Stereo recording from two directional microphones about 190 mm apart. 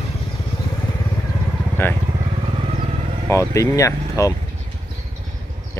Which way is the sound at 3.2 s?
15° left (ahead or behind).